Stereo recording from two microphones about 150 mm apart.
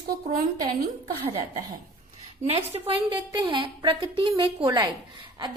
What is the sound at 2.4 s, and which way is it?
Speech, 40° right (ahead or behind).